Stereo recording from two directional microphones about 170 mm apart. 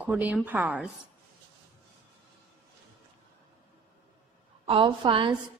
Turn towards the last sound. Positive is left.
turn(degrees=-30)  # may be behind; listen again after turning